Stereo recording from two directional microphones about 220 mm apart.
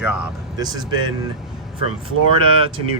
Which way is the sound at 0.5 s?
15° right (ahead or behind).